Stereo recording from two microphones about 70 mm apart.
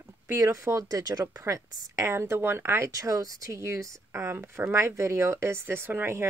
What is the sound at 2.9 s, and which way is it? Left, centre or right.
Speech, right.